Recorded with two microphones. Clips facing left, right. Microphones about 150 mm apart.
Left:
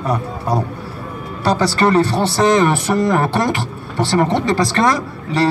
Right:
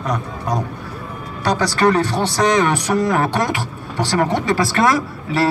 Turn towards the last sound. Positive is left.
turn(degrees=-5)  # may be behind; listen again after turning